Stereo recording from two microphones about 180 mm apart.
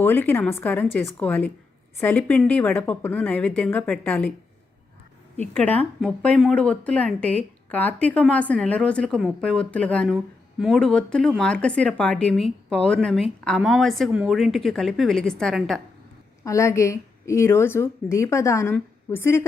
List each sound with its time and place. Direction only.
0.0 s speech: 10° left (ahead or behind)
5.4 s a woman's voice: 10° left (ahead or behind)
16.4 s speech: 15° left (ahead or behind)